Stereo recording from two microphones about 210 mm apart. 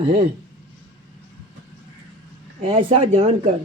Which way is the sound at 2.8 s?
25° right (ahead or behind).